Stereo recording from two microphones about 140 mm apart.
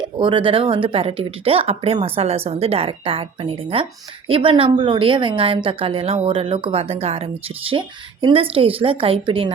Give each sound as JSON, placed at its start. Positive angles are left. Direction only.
{"t": 0.0, "sound": "a woman's voice", "side_deg": -35}